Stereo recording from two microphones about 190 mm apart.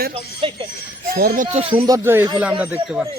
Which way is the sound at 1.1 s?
50° right (ahead or behind).